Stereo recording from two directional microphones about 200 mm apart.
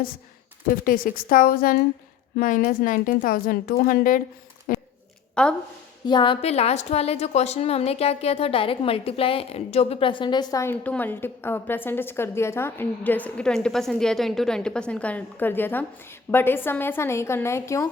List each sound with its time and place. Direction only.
0.9 s a woman's voice: 45° left (ahead or behind)
4.7 s a sound: 45° left (ahead or behind)
5.3 s speech: 5° left (ahead or behind)
6.1 s a woman's voice: 25° left (ahead or behind)